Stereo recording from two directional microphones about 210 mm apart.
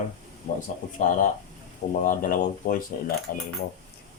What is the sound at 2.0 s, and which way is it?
Speech, 40° left (ahead or behind).